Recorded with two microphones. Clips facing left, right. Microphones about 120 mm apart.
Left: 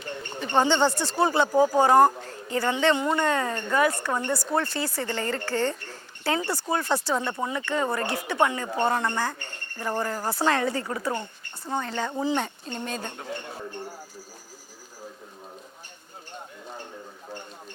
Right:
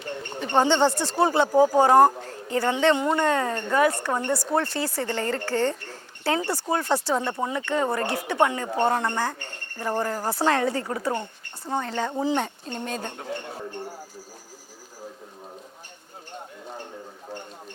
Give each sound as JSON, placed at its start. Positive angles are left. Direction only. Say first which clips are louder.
{"t": 0.0, "sound": "a sound", "louder": "right 2 dB", "side_deg": -45}
{"t": 0.8, "sound": "speech", "louder": "right 2 dB", "side_deg": -30}
{"t": 1.1, "sound": "speech", "louder": "right 2 dB", "side_deg": -45}
{"t": 1.5, "sound": "speech", "louder": "right 3 dB", "side_deg": -35}
{"t": 13.6, "sound": "speech", "louder": "right 2 dB", "side_deg": -25}